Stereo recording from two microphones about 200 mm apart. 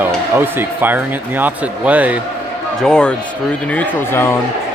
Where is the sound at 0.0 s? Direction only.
10° right (ahead or behind).